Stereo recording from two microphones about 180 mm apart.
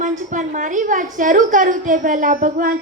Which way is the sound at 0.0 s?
45° right (ahead or behind).